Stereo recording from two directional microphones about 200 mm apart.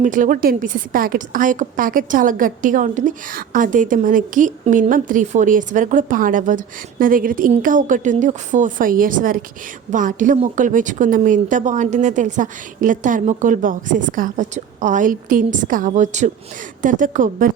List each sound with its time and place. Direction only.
0.0 s a woman's voice: 40° right (ahead or behind)